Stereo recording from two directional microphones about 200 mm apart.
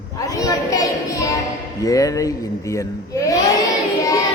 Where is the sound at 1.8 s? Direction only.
15° left (ahead or behind).